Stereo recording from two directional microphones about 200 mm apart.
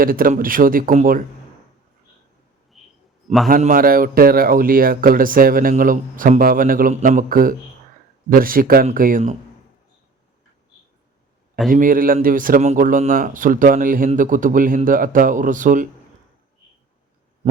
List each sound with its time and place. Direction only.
0.0 s speech: 45° right (ahead or behind)
2.8 s a sound: centre (ahead or behind)
3.5 s speech: 45° right (ahead or behind)
11.7 s speech: 45° right (ahead or behind)